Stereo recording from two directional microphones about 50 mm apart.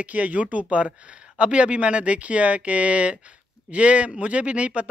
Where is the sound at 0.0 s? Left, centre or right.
Right.